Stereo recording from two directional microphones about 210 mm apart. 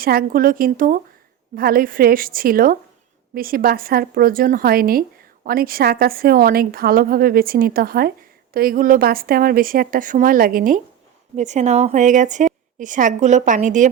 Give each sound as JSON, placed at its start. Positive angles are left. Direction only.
{"t": 0.0, "sound": "a woman's voice", "side_deg": -45}